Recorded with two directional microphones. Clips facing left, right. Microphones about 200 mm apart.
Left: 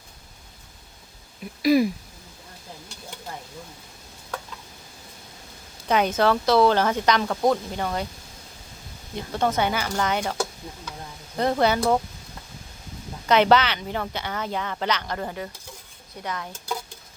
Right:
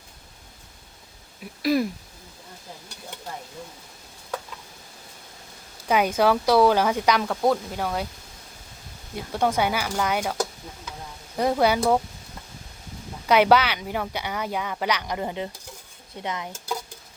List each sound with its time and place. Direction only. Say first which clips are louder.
1.6 s speech: left 4 dB; centre (ahead or behind)
5.9 s speech: even; 10° right (ahead or behind)
9.1 s speech: even; 10° right (ahead or behind)
11.3 s speech: even; 10° right (ahead or behind)
13.2 s speech: even; 10° right (ahead or behind)
16.2 s dishes: right 1 dB; 20° right (ahead or behind)